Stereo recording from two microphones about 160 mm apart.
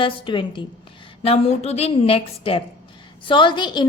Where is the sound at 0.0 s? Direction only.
30° left (ahead or behind).